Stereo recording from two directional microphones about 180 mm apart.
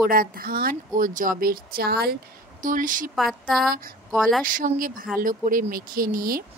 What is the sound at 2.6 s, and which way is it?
Speech, 50° right (ahead or behind).